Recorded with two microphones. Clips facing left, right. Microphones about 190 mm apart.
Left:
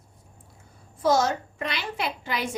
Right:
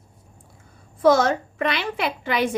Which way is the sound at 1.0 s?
55° right (ahead or behind).